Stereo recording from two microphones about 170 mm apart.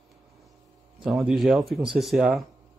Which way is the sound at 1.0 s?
5° right (ahead or behind).